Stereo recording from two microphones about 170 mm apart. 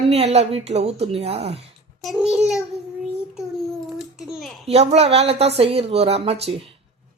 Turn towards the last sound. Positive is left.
turn(degrees=-35)  # may be behind; listen again after turning